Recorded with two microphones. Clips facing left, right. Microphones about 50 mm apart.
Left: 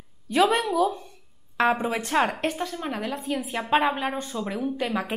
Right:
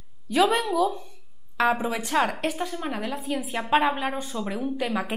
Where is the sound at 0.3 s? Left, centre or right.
Centre.